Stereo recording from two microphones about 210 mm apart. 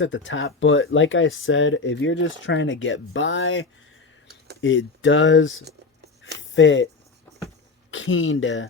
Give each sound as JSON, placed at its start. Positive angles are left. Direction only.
{"t": 0.0, "sound": "speech", "side_deg": 65}
{"t": 7.9, "sound": "speech", "side_deg": 65}